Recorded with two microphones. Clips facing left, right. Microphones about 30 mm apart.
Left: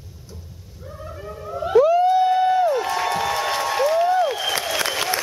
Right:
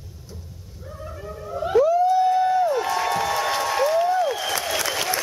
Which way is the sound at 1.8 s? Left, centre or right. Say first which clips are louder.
Left 2 dB; left.